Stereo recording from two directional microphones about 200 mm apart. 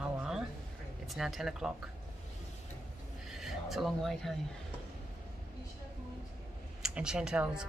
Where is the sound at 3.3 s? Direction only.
Centre (ahead or behind).